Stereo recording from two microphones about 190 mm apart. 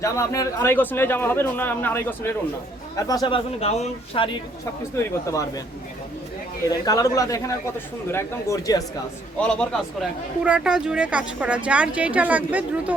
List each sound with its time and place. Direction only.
0.0 s a man's voice: 15° left (ahead or behind); by 4.3 s 30° left (ahead or behind)
6.7 s a man's voice: 20° left (ahead or behind)
9.4 s a man's voice: 5° left (ahead or behind)
10.4 s speech: 5° right (ahead or behind)